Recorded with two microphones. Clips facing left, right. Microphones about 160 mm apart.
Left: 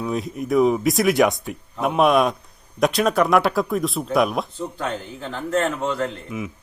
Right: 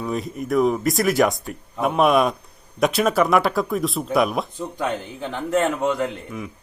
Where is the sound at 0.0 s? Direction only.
Centre (ahead or behind).